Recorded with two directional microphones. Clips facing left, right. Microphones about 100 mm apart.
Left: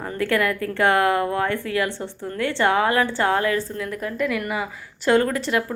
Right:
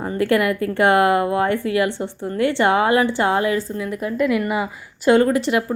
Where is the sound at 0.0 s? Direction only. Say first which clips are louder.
Right 4 dB; 25° right (ahead or behind).